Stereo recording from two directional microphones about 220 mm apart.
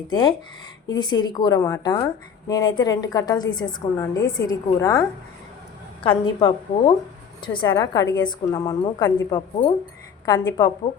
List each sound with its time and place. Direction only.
0.9 s a woman's voice: 20° left (ahead or behind)